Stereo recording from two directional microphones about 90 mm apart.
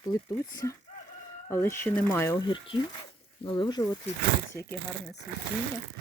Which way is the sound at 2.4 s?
65° left (ahead or behind).